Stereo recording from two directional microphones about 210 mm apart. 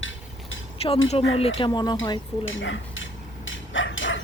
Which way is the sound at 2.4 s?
65° left (ahead or behind).